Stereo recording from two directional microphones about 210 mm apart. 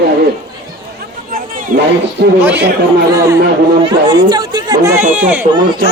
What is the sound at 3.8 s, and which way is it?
Speech, 20° right (ahead or behind).